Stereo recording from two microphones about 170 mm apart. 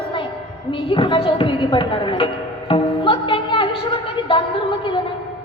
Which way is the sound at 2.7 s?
30° left (ahead or behind).